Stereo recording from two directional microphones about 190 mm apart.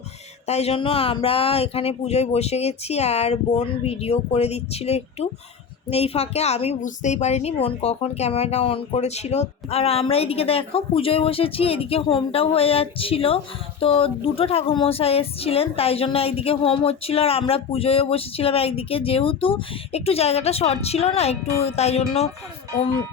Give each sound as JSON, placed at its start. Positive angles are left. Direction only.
{"t": 0.4, "sound": "speech", "side_deg": 35}